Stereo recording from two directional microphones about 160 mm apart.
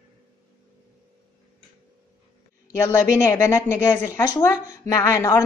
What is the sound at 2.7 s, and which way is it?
A woman's voice, 15° left (ahead or behind).